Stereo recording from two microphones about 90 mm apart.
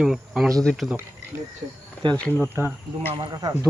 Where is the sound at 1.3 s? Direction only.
30° right (ahead or behind).